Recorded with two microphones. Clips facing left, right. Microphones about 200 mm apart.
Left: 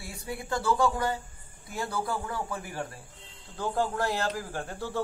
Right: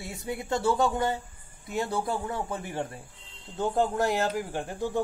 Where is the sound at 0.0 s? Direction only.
20° right (ahead or behind).